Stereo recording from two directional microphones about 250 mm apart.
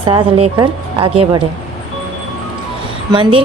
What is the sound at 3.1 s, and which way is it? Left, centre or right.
Speech, right.